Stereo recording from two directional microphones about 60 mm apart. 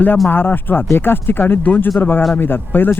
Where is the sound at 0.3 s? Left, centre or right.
Left.